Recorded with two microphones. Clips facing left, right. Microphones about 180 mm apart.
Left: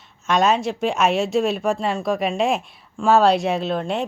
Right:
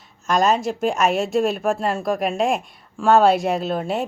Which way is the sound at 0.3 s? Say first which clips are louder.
Even; centre (ahead or behind).